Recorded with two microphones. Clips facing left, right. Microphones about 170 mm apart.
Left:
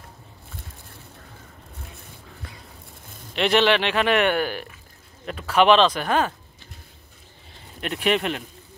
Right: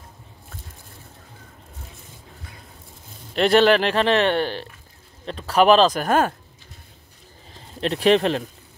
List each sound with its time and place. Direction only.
3.3 s speech: 40° right (ahead or behind)
7.8 s speech: 35° right (ahead or behind)